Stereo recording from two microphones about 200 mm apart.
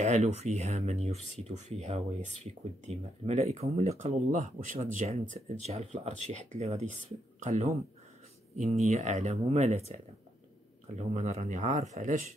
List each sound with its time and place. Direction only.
0.0 s speech: 35° right (ahead or behind)
8.8 s speech: 35° right (ahead or behind)
11.0 s speech: 35° right (ahead or behind)